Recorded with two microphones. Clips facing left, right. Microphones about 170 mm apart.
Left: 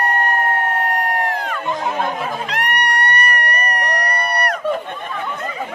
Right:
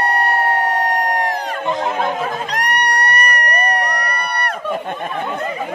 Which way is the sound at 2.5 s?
40° right (ahead or behind).